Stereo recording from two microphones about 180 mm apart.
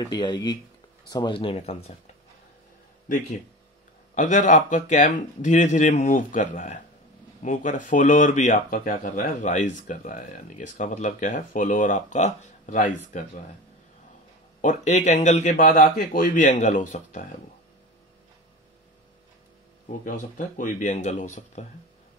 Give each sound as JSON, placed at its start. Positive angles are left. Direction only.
{"t": 0.1, "sound": "speech", "side_deg": 25}
{"t": 4.1, "sound": "speech", "side_deg": 45}
{"t": 14.6, "sound": "speech", "side_deg": 40}
{"t": 19.9, "sound": "speech", "side_deg": 50}